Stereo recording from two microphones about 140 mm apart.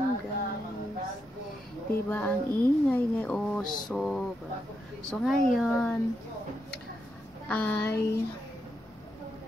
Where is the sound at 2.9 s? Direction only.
10° left (ahead or behind).